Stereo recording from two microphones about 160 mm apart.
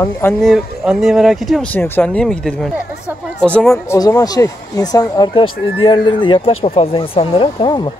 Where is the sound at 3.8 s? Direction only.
20° left (ahead or behind).